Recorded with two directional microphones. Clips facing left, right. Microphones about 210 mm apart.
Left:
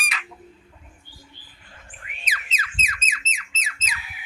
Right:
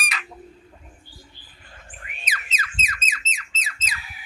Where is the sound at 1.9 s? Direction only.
45° right (ahead or behind).